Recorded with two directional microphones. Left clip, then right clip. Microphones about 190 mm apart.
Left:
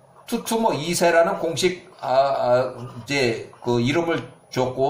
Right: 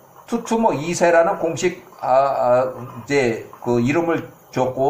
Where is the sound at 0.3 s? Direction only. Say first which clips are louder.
Right 3 dB; centre (ahead or behind).